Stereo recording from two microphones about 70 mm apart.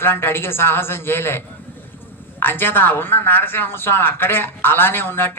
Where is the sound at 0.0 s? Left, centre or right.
Left.